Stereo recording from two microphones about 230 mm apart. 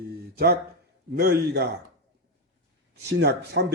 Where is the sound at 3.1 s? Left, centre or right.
Right.